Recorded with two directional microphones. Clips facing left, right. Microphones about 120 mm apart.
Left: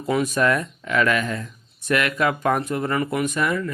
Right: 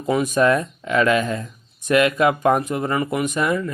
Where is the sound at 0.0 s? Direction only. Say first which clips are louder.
Right 3 dB; 15° right (ahead or behind).